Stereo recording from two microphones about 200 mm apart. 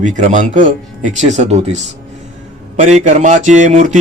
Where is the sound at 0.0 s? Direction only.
40° right (ahead or behind).